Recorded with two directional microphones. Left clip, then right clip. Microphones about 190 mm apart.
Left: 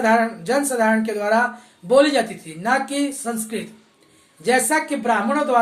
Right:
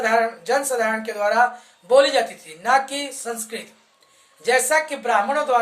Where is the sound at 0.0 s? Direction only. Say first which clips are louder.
Left 2 dB; 10° right (ahead or behind).